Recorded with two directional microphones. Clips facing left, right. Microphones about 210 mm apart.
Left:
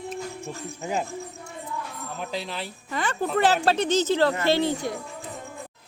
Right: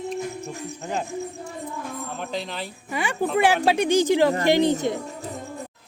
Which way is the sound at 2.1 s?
Centre (ahead or behind).